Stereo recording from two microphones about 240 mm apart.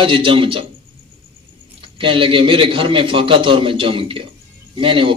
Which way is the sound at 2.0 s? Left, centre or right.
Right.